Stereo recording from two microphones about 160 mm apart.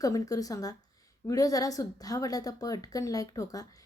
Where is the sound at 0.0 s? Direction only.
20° left (ahead or behind).